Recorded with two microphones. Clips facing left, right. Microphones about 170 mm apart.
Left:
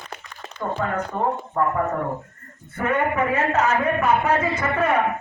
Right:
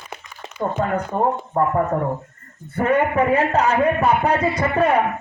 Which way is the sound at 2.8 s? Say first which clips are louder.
Right 4 dB; 35° right (ahead or behind).